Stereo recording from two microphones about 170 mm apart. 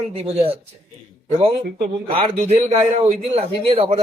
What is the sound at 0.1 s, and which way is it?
Speech, 35° right (ahead or behind).